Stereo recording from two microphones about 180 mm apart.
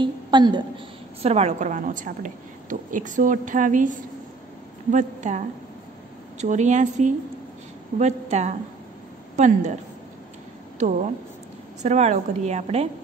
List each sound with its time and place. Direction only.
0.0 s a woman's voice: 25° right (ahead or behind); by 3.9 s 45° right (ahead or behind)
4.9 s a woman's voice: 40° right (ahead or behind)
10.8 s a woman's voice: 40° right (ahead or behind)